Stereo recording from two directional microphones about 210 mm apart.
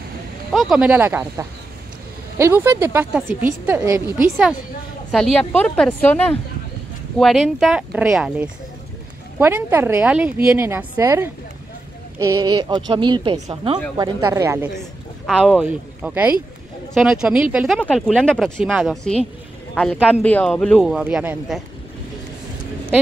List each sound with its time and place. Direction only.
0.5 s a woman's voice: centre (ahead or behind)
5.1 s a woman's voice: 5° left (ahead or behind); by 14.7 s 10° right (ahead or behind)
14.8 s speech: centre (ahead or behind)